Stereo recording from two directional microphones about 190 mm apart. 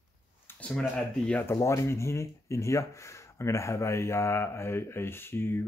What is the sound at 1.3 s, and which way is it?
Speech, 10° left (ahead or behind).